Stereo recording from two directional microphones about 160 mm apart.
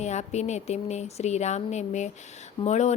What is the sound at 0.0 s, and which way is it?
Speech, 45° left (ahead or behind).